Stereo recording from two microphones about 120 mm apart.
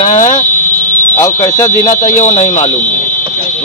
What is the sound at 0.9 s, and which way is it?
Speech, 20° left (ahead or behind).